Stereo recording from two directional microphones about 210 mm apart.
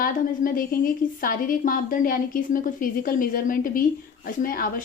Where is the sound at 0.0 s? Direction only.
40° left (ahead or behind).